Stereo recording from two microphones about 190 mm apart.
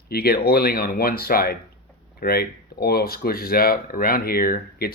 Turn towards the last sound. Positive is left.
turn(degrees=50)  # may be behind; listen again after turning